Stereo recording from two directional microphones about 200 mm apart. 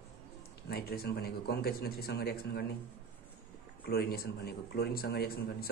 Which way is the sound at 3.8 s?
50° left (ahead or behind).